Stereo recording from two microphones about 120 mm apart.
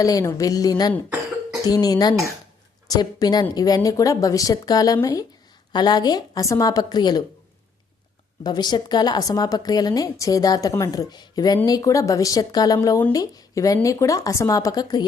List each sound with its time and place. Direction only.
0.0 s a woman's voice: 30° left (ahead or behind)
8.4 s a woman's voice: 35° left (ahead or behind)